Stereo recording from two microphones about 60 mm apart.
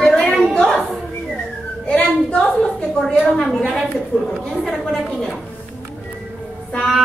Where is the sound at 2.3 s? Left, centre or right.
Centre.